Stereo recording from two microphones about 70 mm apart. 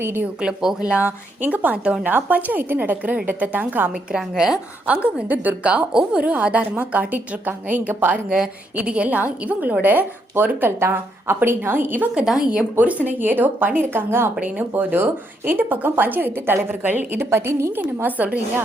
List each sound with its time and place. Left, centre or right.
0.0 s a woman's voice: right
0.4 s a woman's voice: centre; by 3.9 s right
4.1 s a woman's voice: centre; by 12.2 s right
12.2 s a woman's voice: centre; by 14.3 s right
14.3 s a woman's voice: centre